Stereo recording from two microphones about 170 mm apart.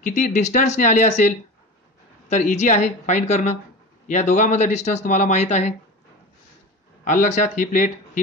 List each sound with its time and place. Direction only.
0.0 s speech: 45° left (ahead or behind)
7.1 s speech: 45° left (ahead or behind)